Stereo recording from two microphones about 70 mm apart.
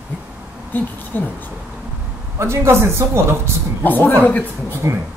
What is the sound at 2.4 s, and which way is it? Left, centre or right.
Speech, right.